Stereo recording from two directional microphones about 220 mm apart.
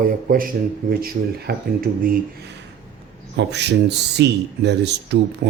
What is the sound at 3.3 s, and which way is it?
Speech, 50° right (ahead or behind).